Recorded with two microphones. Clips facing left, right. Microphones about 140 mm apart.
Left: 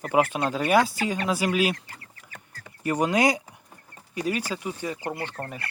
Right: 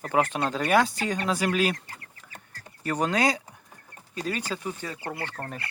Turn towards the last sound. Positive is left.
turn(degrees=15)  # may be behind; listen again after turning